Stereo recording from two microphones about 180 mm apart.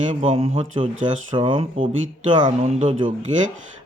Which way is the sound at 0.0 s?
40° right (ahead or behind).